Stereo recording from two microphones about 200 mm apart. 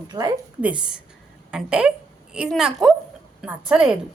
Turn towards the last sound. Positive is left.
turn(degrees=-5)  # may be behind; listen again after turning